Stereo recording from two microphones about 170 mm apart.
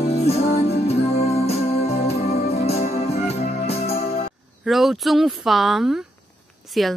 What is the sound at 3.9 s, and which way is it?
Music, 60° left (ahead or behind).